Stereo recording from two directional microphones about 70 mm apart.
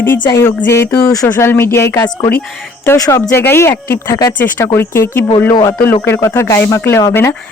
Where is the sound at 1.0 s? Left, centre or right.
Left.